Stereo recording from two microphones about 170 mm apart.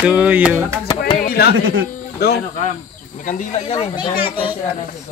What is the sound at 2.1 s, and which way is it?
Speech, 65° left (ahead or behind).